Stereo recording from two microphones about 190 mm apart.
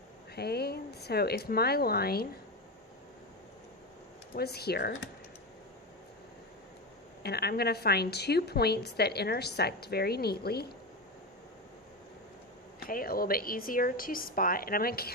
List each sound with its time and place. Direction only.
0.3 s a woman's voice: 55° left (ahead or behind)
4.4 s a woman's voice: 55° left (ahead or behind)
7.2 s a woman's voice: 55° left (ahead or behind)
12.9 s a woman's voice: 50° left (ahead or behind)